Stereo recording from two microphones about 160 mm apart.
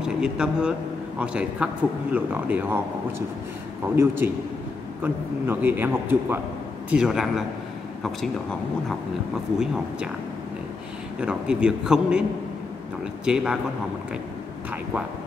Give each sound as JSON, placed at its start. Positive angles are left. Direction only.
{"t": 0.0, "sound": "a man's voice", "side_deg": -5}
{"t": 3.9, "sound": "a man's voice", "side_deg": -15}
{"t": 11.1, "sound": "a man's voice", "side_deg": -5}